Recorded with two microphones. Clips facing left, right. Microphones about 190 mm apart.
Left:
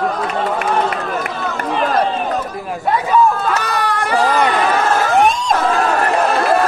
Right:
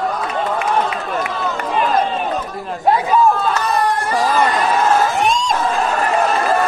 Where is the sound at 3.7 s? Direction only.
80° left.